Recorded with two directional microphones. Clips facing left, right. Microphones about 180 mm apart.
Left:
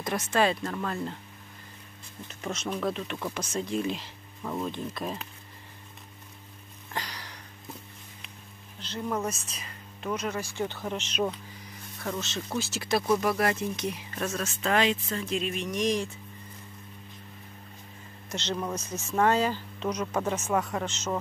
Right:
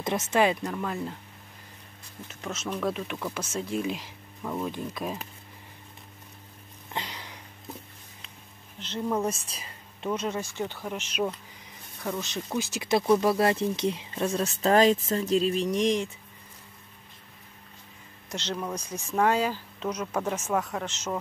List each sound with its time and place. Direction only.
0.0 s speech: 25° right (ahead or behind)
2.4 s speech: centre (ahead or behind)
6.9 s a sound: 20° right (ahead or behind)
8.7 s speech: 20° right (ahead or behind)
10.7 s speech: 10° right (ahead or behind); by 16.1 s 25° right (ahead or behind)
18.3 s speech: 5° right (ahead or behind)
18.8 s speech: 10° right (ahead or behind)